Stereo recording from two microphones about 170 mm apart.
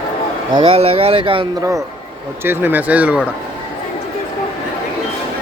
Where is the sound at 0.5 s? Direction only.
30° right (ahead or behind).